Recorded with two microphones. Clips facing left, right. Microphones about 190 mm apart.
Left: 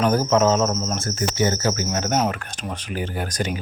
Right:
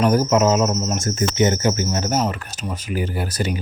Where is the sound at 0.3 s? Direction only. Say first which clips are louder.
Right 1 dB; 10° right (ahead or behind).